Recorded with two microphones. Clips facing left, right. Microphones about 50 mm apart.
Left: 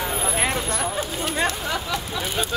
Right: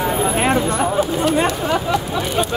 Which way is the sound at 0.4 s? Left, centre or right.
Right.